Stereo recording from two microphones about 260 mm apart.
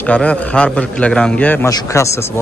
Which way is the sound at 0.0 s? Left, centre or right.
Centre.